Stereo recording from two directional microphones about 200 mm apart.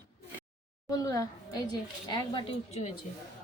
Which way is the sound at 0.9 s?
15° left (ahead or behind).